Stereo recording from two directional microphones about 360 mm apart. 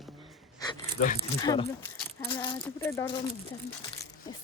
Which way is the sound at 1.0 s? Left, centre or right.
Left.